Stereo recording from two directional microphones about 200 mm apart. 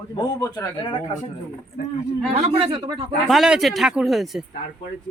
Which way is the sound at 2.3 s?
30° right (ahead or behind).